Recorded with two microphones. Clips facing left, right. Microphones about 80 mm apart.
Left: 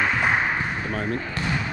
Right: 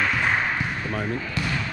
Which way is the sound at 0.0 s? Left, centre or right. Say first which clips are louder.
Left 1 dB; centre.